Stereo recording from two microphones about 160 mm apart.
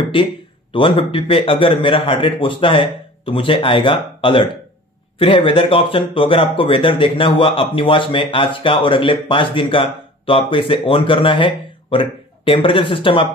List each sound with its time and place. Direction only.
0.1 s speech: 35° left (ahead or behind)